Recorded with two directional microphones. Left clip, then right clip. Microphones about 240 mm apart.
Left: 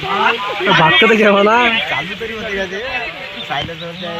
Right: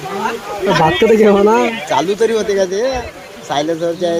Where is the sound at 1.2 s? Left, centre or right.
Left.